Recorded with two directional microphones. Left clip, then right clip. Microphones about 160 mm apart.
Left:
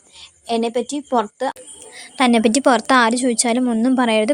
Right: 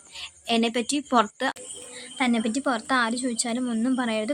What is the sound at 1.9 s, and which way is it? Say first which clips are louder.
Speech: left 9 dB; 60° left (ahead or behind).